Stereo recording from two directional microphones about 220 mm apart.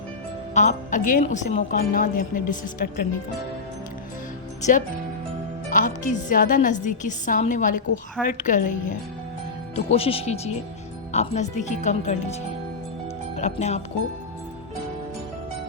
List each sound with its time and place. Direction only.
0.5 s a woman's voice: 35° left (ahead or behind)
4.6 s a woman's voice: 35° left (ahead or behind)
9.7 s a woman's voice: 25° left (ahead or behind)